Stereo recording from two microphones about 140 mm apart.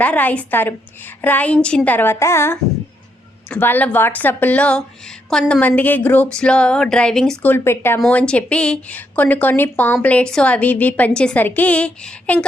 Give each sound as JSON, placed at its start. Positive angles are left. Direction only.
{"t": 0.0, "sound": "a woman's voice", "side_deg": 10}
{"t": 7.5, "sound": "a woman's voice", "side_deg": 15}